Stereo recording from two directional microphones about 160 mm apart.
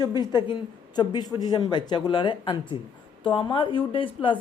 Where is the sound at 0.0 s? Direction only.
25° left (ahead or behind).